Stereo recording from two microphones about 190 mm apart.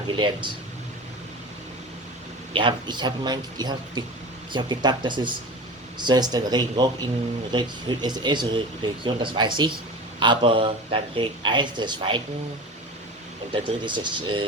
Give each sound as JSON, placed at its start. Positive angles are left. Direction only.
{"t": 2.5, "sound": "speech", "side_deg": -25}
{"t": 13.5, "sound": "speech", "side_deg": -25}